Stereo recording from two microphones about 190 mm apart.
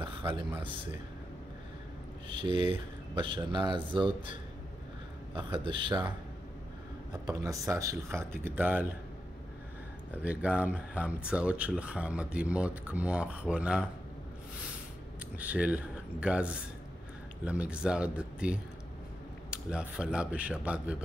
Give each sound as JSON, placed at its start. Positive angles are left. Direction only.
{"t": 0.0, "sound": "speech", "side_deg": -25}
{"t": 2.2, "sound": "speech", "side_deg": -25}
{"t": 5.3, "sound": "speech", "side_deg": -25}
{"t": 7.2, "sound": "speech", "side_deg": -15}
{"t": 10.1, "sound": "speech", "side_deg": -10}
{"t": 15.3, "sound": "speech", "side_deg": -5}